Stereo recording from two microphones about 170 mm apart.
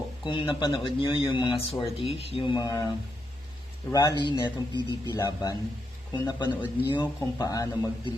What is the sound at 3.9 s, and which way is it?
Speech, 20° left (ahead or behind).